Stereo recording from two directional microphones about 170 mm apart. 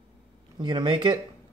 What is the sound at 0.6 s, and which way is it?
Speech, 25° right (ahead or behind).